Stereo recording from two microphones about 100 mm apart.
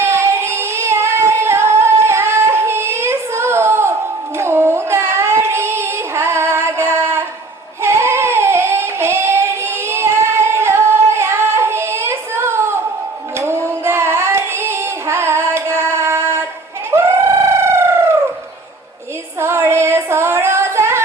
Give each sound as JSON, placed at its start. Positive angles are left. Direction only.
{"t": 0.0, "sound": "singing", "side_deg": -25}
{"t": 4.4, "sound": "child singing", "side_deg": -25}
{"t": 16.9, "sound": "a sound", "side_deg": -25}
{"t": 19.4, "sound": "female singing", "side_deg": -25}